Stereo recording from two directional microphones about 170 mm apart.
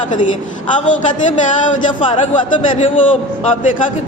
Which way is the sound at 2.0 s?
35° left (ahead or behind).